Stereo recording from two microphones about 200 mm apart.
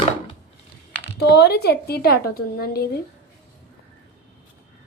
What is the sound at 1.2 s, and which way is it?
A woman's voice, 55° left (ahead or behind).